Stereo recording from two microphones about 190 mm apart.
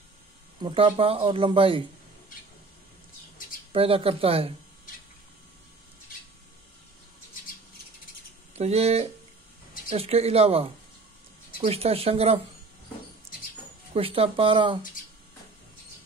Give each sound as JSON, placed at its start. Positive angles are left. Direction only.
{"t": 0.6, "sound": "speech", "side_deg": -25}
{"t": 3.7, "sound": "speech", "side_deg": -30}
{"t": 8.5, "sound": "speech", "side_deg": -35}
{"t": 13.9, "sound": "speech", "side_deg": -30}